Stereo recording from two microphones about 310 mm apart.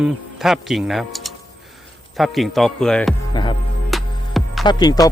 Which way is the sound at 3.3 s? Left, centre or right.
Centre.